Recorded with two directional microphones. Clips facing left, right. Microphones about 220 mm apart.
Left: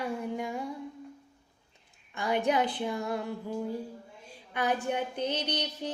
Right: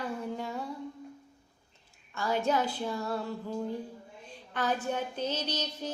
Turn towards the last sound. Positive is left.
turn(degrees=15)  # may be behind; listen again after turning